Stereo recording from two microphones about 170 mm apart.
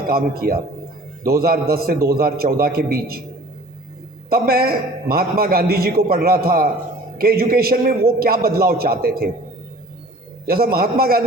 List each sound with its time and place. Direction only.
0.1 s a man's voice: 60° right (ahead or behind)
4.3 s a man's voice: 60° right (ahead or behind)
10.4 s a man's voice: 60° right (ahead or behind)